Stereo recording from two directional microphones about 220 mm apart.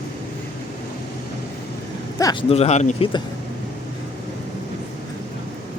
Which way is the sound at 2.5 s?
30° left (ahead or behind).